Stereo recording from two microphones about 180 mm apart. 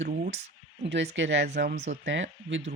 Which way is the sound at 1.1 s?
85° right.